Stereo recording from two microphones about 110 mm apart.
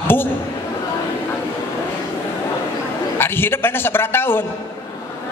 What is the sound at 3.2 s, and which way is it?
A man's voice, 20° left (ahead or behind).